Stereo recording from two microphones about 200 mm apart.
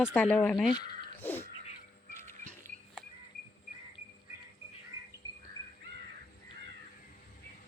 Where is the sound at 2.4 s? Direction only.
40° right (ahead or behind).